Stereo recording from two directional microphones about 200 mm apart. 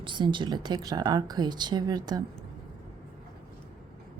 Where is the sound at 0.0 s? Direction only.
25° right (ahead or behind).